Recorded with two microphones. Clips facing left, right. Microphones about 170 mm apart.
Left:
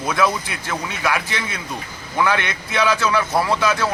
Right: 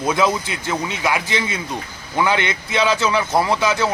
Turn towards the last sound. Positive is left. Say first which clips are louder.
# right 1 dB
turn(degrees=-20)  # may be behind; listen again after turning